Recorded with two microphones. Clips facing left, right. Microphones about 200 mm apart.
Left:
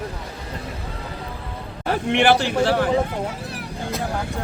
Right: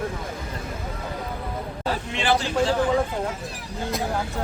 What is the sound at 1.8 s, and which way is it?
Speech, 65° left (ahead or behind).